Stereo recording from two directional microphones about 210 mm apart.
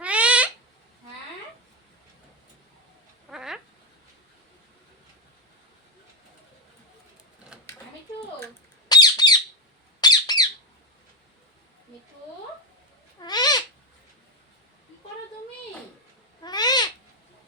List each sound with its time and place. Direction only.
0.0 s owl: 5° right (ahead or behind)
3.2 s a sound: centre (ahead or behind)
8.9 s squawk: 20° left (ahead or behind)
10.0 s bird: 20° left (ahead or behind)
13.2 s cat: 20° left (ahead or behind)
16.4 s babbling: 20° left (ahead or behind)